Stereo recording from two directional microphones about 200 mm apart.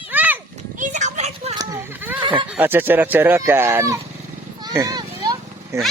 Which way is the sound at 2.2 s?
25° right (ahead or behind).